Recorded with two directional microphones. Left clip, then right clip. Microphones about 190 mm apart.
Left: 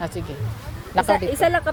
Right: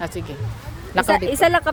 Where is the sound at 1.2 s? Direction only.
55° right (ahead or behind).